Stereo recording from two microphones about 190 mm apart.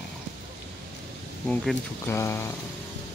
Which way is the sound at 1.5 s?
10° left (ahead or behind).